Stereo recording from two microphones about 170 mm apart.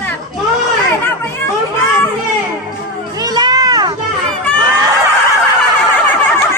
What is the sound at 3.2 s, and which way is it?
Children playing, 25° right (ahead or behind).